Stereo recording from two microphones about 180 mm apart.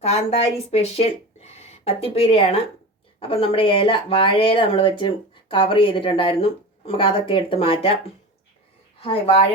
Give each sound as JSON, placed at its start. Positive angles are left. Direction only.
{"t": 0.0, "sound": "speech", "side_deg": 35}
{"t": 9.0, "sound": "speech", "side_deg": 30}